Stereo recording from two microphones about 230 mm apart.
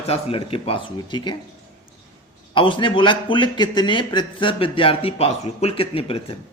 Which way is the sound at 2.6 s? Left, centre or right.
Left.